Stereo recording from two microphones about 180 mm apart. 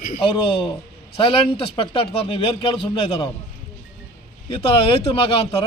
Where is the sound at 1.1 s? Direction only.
30° left (ahead or behind).